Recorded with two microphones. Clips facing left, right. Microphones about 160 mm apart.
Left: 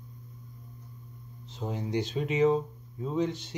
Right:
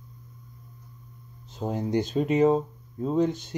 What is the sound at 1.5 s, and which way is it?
Speech, 50° right (ahead or behind).